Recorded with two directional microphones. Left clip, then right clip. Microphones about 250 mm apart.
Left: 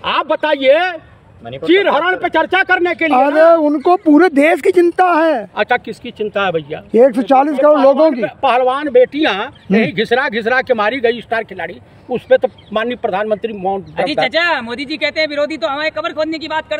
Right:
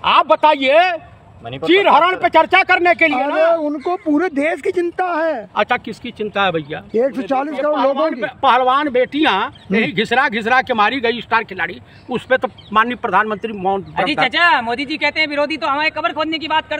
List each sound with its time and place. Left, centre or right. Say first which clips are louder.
0.0 s speech: right 4 dB; centre
3.1 s speech: left 6 dB; left
5.6 s speech: left 2 dB; centre
6.9 s speech: left 8 dB; left
8.4 s speech: right 3 dB; centre
14.2 s speech: right 3 dB; right